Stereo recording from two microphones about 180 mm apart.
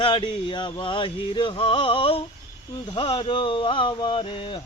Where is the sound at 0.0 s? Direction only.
30° left (ahead or behind).